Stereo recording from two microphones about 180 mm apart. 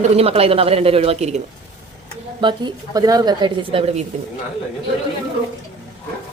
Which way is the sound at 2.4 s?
25° right (ahead or behind).